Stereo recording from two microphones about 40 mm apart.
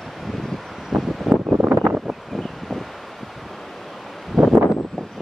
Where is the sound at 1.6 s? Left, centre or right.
Right.